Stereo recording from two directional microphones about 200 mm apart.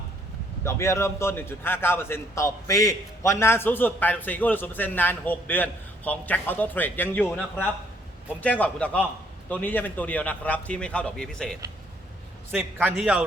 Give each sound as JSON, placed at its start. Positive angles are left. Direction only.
{"t": 0.6, "sound": "a man's voice", "side_deg": 15}